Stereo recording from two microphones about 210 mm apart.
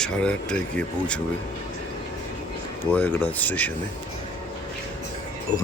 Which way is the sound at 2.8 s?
10° left (ahead or behind).